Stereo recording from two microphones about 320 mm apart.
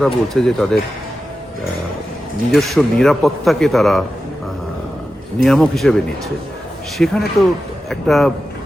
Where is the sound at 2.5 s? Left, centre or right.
Centre.